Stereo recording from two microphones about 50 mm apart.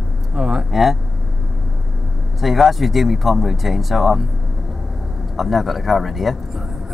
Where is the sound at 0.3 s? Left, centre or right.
Centre.